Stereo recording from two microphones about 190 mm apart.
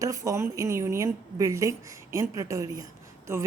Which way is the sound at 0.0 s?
15° right (ahead or behind).